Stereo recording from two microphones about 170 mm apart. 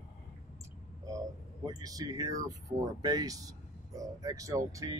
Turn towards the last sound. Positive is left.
turn(degrees=-20)  # may be behind; listen again after turning